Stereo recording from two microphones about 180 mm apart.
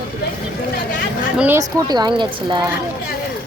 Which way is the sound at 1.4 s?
10° right (ahead or behind).